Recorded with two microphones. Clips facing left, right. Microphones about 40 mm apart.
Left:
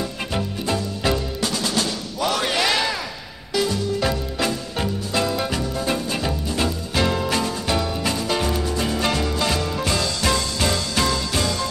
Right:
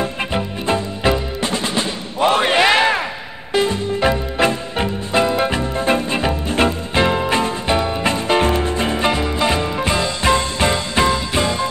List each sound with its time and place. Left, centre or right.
0.3 s music: right